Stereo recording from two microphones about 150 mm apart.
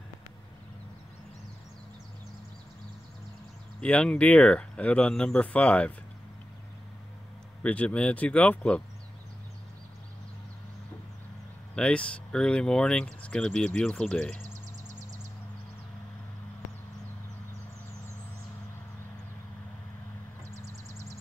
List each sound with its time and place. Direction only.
3.8 s speech: 5° left (ahead or behind)
7.6 s speech: 10° left (ahead or behind)
11.7 s speech: 5° left (ahead or behind)